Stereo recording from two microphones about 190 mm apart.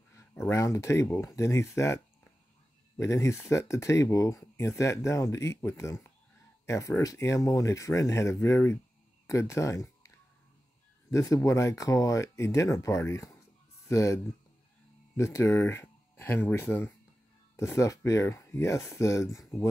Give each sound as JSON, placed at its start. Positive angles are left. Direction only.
{"t": 0.1, "sound": "speech", "side_deg": 15}
{"t": 3.0, "sound": "speech", "side_deg": 15}